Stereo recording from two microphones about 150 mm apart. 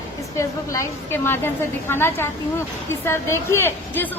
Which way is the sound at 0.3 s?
20° left (ahead or behind).